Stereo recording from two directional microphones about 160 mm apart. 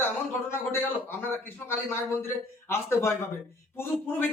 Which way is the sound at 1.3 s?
15° left (ahead or behind).